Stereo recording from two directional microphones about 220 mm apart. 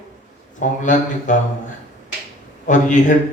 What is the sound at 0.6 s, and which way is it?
Speech, 35° left (ahead or behind).